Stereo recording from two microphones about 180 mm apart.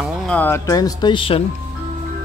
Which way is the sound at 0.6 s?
20° left (ahead or behind).